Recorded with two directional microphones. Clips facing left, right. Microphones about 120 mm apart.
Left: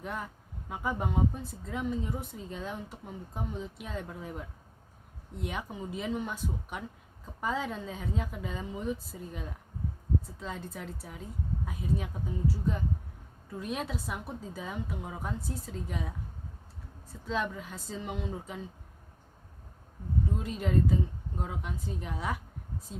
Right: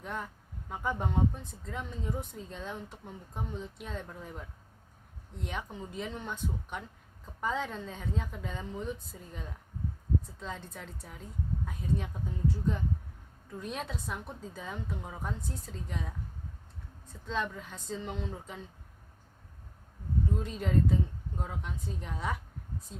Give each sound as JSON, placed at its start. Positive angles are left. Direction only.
{"t": 0.0, "sound": "speech", "side_deg": 5}
{"t": 20.4, "sound": "speech", "side_deg": 0}